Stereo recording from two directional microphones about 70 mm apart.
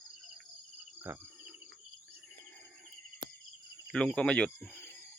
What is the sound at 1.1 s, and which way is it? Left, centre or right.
Cricket, right.